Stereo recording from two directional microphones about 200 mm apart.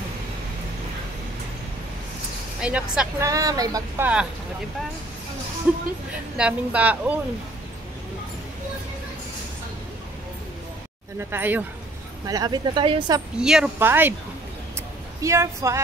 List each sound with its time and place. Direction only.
2.6 s speech: 5° right (ahead or behind)
3.3 s speech: 15° right (ahead or behind)
6.3 s speech: 5° right (ahead or behind)
11.1 s speech: 10° right (ahead or behind)
13.4 s speech: 5° right (ahead or behind)
15.2 s speech: 15° right (ahead or behind)